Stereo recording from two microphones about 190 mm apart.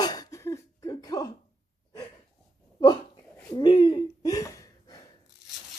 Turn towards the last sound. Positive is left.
turn(degrees=20)  # may be behind; listen again after turning